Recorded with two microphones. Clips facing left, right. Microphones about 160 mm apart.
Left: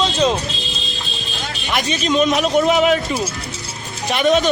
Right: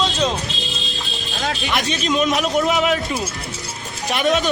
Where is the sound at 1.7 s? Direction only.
Centre (ahead or behind).